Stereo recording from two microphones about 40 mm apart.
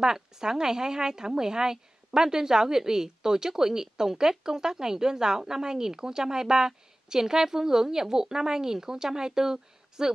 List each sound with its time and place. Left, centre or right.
0.0 s speech: centre